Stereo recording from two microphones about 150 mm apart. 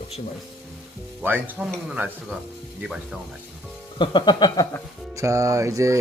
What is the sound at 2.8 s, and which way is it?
Speech, centre (ahead or behind).